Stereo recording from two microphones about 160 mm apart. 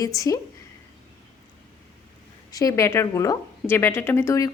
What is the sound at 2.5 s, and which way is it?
A woman's voice, 20° left (ahead or behind).